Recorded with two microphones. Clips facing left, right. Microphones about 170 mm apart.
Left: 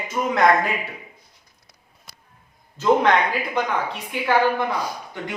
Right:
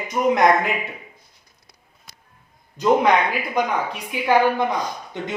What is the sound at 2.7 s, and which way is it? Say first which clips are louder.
A woman's voice: right 1 dB; 10° right (ahead or behind).